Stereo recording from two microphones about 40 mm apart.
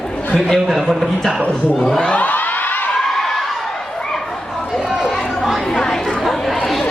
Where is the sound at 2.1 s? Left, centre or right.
Left.